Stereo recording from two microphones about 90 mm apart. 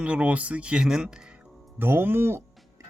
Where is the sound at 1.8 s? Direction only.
25° right (ahead or behind).